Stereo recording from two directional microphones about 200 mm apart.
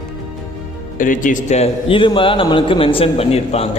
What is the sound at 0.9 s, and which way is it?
A man's voice, 40° left (ahead or behind).